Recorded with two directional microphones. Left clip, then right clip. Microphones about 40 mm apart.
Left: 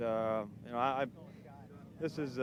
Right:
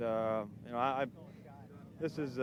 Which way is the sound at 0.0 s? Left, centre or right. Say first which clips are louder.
Even; centre.